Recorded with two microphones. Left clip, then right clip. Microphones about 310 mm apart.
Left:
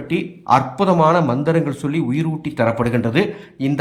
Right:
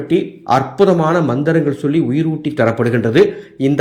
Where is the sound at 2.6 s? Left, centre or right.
Centre.